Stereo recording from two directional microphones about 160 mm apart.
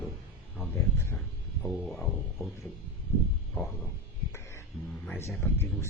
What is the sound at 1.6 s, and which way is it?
Speech, centre (ahead or behind).